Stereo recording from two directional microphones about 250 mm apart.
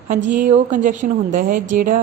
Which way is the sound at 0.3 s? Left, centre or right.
Right.